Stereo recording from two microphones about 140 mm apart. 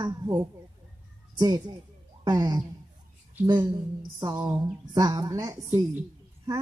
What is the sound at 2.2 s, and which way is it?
Speech, 30° right (ahead or behind).